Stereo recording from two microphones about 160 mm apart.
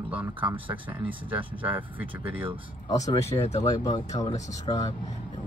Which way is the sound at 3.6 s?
20° left (ahead or behind).